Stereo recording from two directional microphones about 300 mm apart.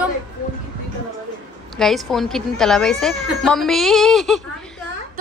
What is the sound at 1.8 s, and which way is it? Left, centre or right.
Speech, centre.